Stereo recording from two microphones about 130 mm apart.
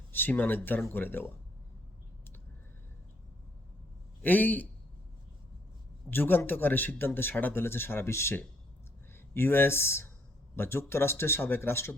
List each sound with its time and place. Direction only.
0.1 s speech: 15° left (ahead or behind)
4.2 s a man's voice: 15° left (ahead or behind)
6.1 s speech: 15° left (ahead or behind)